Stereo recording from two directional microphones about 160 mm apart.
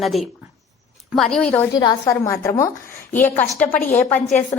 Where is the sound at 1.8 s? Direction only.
20° left (ahead or behind).